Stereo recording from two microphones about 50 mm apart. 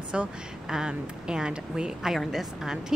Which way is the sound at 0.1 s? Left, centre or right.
Centre.